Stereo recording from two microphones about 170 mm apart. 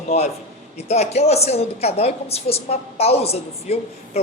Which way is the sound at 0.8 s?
40° left (ahead or behind).